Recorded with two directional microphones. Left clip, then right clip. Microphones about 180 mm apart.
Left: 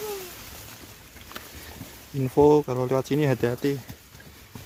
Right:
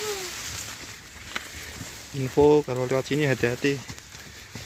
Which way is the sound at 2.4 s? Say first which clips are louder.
Even; 25° left (ahead or behind).